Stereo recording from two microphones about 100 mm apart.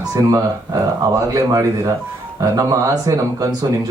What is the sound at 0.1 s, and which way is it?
Speech, 35° right (ahead or behind).